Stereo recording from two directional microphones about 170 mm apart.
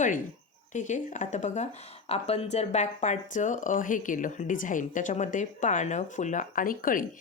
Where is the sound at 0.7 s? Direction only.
45° left (ahead or behind).